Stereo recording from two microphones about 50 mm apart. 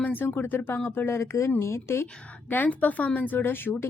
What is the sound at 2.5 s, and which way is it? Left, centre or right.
Speech, left.